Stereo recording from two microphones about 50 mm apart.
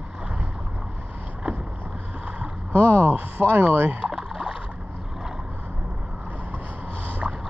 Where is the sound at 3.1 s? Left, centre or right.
Right.